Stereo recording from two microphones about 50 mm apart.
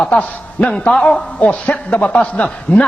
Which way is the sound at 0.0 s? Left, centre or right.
Left.